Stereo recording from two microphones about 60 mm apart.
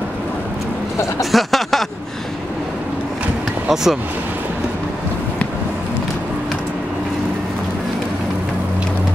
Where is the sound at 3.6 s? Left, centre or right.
Centre.